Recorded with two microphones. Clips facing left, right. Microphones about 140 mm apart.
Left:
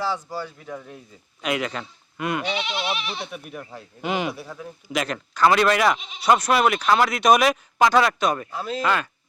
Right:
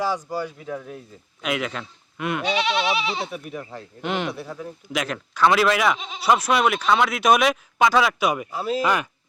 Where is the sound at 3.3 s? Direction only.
Centre (ahead or behind).